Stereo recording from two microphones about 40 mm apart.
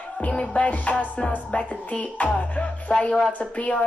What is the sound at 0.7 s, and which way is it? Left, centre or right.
Speech, left.